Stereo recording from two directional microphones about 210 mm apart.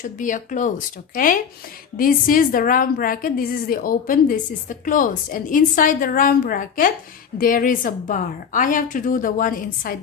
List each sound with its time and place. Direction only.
0.0 s a woman's voice: 40° left (ahead or behind)